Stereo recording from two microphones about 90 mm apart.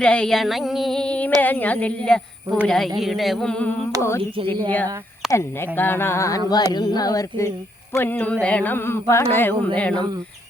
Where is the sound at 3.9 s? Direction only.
30° left (ahead or behind).